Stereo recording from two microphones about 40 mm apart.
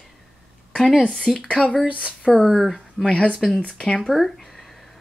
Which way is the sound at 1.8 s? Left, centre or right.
Right.